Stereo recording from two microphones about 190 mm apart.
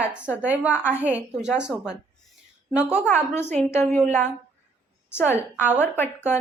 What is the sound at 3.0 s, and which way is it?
A woman's voice, 10° left (ahead or behind).